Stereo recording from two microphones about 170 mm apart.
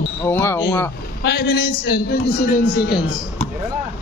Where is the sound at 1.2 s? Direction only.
80° left.